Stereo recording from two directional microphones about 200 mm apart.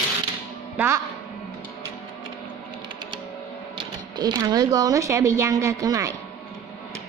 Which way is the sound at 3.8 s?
20° right (ahead or behind).